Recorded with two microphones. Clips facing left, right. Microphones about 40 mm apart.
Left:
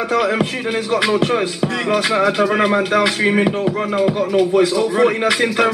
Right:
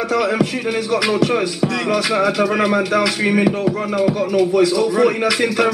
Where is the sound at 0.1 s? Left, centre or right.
Left.